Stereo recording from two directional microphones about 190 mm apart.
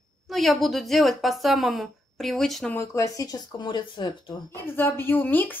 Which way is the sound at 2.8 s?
15° left (ahead or behind).